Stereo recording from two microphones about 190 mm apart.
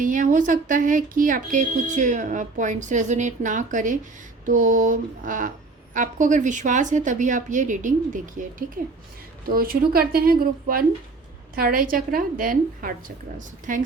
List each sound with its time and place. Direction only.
0.0 s a woman's voice: 45° right (ahead or behind)